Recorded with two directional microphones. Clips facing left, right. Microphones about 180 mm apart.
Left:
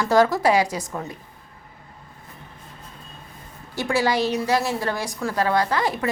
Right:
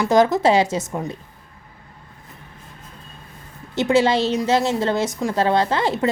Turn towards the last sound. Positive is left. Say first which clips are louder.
# right 3 dB
turn(degrees=-25)  # may be behind; listen again after turning